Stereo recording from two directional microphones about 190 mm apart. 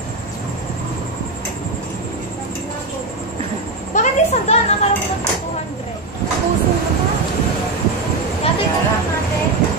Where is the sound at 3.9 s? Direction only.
35° left (ahead or behind).